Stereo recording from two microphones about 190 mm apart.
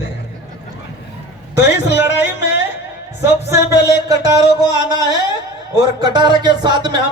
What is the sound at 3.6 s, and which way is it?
Music, 65° left (ahead or behind).